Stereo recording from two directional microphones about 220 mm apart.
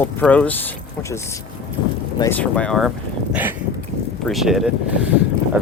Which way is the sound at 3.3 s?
10° right (ahead or behind).